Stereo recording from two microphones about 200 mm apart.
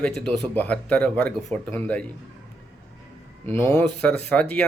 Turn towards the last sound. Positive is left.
turn(degrees=5)  # may be behind; listen again after turning